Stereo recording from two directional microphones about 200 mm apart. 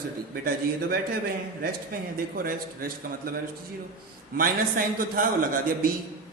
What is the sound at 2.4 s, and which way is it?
Speech, 45° right (ahead or behind).